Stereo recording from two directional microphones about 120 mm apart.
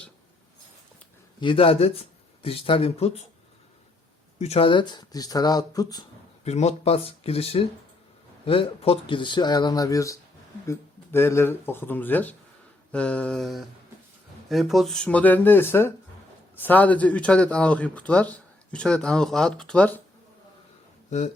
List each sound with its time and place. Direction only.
1.4 s speech: 45° left (ahead or behind)
4.4 s speech: 60° left (ahead or behind); by 6.1 s 30° left (ahead or behind)
6.4 s speech: 65° left (ahead or behind); by 19.9 s 5° left (ahead or behind)